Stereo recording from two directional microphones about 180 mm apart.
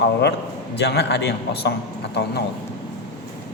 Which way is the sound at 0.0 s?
70° left (ahead or behind).